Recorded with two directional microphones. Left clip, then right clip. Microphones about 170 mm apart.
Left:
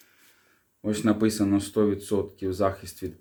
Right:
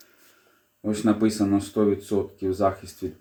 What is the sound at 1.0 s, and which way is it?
Speech, 20° left (ahead or behind).